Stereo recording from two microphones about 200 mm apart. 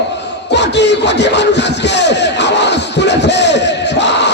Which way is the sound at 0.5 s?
60° left (ahead or behind).